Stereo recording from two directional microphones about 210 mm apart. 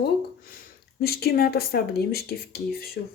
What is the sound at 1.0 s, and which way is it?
Speech, 50° left (ahead or behind).